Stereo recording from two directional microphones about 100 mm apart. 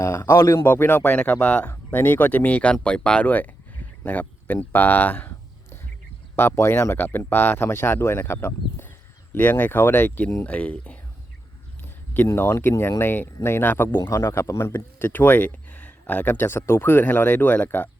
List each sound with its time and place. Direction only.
0.0 s speech: 30° left (ahead or behind)
0.6 s speech: 20° left (ahead or behind)
6.3 s speech: 25° left (ahead or behind)
11.8 s a sound: 20° left (ahead or behind)
12.3 s speech: 25° left (ahead or behind)